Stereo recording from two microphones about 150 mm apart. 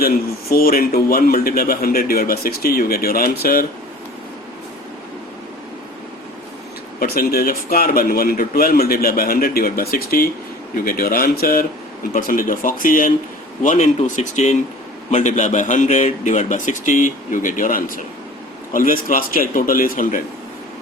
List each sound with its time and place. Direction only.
0.0 s a man's voice: 80° left
7.0 s a man's voice: 85° left
9.9 s a man's voice: 75° left (ahead or behind)